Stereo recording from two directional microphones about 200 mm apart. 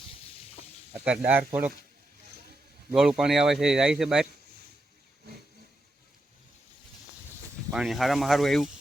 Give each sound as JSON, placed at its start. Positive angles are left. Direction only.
{"t": 1.0, "sound": "speech", "side_deg": -5}
{"t": 2.9, "sound": "speech", "side_deg": 0}
{"t": 7.7, "sound": "speech", "side_deg": -5}